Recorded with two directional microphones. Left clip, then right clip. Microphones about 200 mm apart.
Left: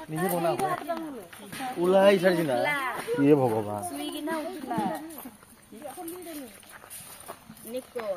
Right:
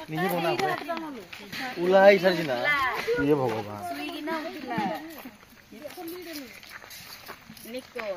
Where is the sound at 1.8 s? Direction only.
55° left (ahead or behind).